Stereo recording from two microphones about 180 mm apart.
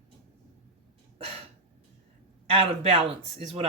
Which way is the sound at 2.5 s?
30° right (ahead or behind).